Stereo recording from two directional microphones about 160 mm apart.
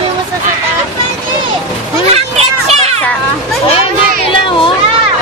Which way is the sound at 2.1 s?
40° right (ahead or behind).